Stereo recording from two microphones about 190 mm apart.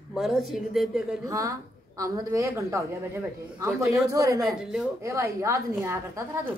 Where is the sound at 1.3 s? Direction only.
20° right (ahead or behind).